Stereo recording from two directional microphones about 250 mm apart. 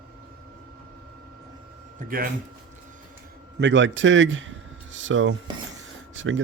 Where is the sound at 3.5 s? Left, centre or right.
Right.